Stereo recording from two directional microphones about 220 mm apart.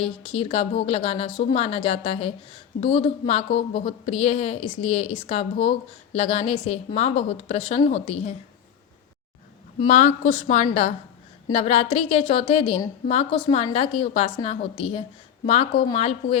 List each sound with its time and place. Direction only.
0.0 s a woman's voice: 25° left (ahead or behind)
9.8 s a woman's voice: 30° left (ahead or behind)